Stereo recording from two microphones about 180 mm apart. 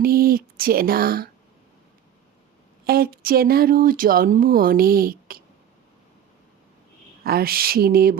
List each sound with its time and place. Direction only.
0.0 s speech: 55° right (ahead or behind)
2.8 s speech: 55° right (ahead or behind)
7.3 s speech: 55° right (ahead or behind)